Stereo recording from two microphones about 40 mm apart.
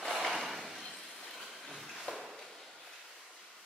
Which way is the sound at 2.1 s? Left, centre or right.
Left.